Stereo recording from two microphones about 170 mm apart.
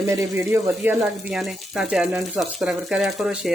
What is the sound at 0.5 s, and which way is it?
Speech, centre (ahead or behind).